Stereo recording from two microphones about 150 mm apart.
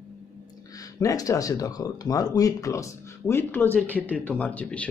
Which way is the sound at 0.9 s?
25° left (ahead or behind).